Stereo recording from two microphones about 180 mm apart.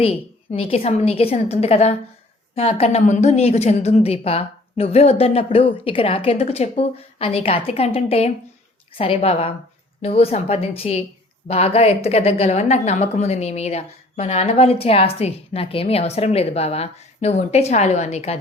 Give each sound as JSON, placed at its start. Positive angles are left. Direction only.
{"t": 0.0, "sound": "a woman's voice", "side_deg": 30}